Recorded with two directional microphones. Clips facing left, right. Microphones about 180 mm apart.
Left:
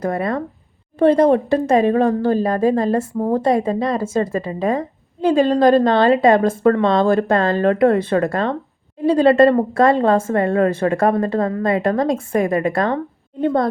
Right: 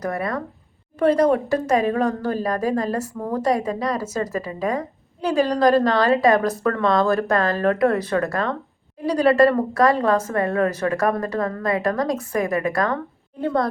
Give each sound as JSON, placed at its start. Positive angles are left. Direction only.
{"t": 0.0, "sound": "speech", "side_deg": 25}